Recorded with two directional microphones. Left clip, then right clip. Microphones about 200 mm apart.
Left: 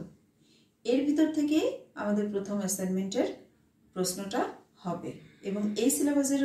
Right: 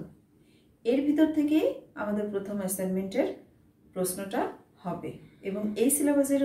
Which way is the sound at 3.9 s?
15° right (ahead or behind).